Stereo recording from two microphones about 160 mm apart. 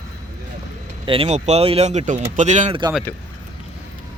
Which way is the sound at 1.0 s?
35° right (ahead or behind).